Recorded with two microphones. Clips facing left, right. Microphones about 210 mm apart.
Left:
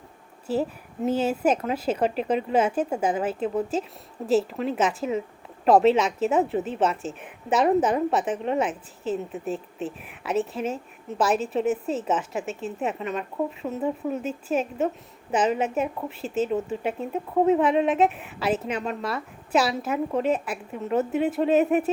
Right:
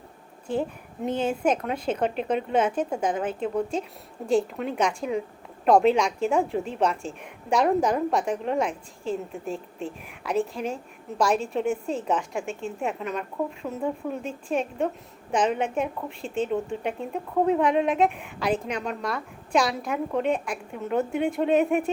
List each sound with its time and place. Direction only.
0.5 s a woman's voice: 5° left (ahead or behind)